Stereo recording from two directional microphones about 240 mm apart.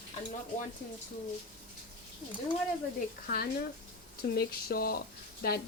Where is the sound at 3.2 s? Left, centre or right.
Left.